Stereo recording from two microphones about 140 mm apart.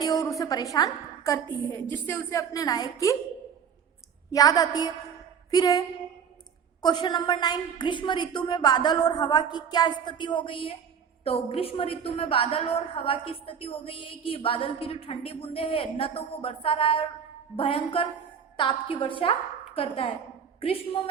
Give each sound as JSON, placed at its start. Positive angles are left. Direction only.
{"t": 0.0, "sound": "a woman's voice", "side_deg": 25}
{"t": 4.3, "sound": "a woman's voice", "side_deg": 25}
{"t": 6.8, "sound": "a woman's voice", "side_deg": 30}